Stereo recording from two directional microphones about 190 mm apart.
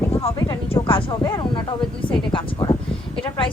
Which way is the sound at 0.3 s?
20° left (ahead or behind).